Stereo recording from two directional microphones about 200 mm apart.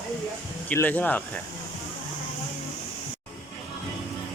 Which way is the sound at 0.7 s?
10° left (ahead or behind).